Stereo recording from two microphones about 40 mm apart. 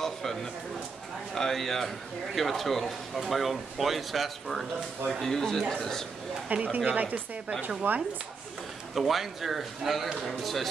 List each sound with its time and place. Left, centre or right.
0.0 s a sound: centre
1.3 s a man's voice: centre
6.5 s speech: right
7.9 s speech: right
8.9 s speech: centre